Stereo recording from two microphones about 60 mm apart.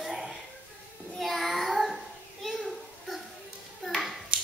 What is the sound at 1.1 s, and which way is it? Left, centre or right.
Child singing, centre.